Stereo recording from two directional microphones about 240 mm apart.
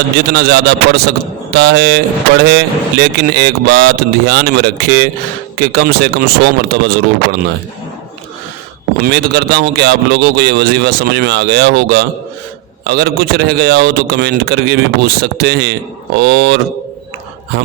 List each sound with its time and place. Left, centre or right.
0.3 s speech: right
9.0 s speech: right